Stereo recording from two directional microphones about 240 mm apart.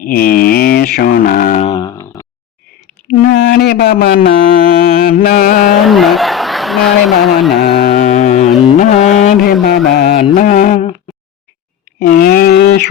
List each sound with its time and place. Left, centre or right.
0.0 s mantra: left; by 2.2 s centre
3.1 s a sound: left
5.0 s music: left
5.8 s speech: centre
7.7 s mantra: left
7.9 s music: left
11.9 s a sound: left